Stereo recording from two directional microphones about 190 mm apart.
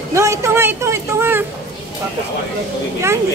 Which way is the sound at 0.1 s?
15° right (ahead or behind).